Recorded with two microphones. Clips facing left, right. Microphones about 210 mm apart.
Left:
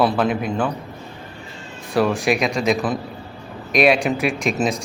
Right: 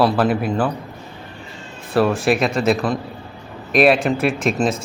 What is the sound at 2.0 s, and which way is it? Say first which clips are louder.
A man's voice: right 2 dB; centre (ahead or behind).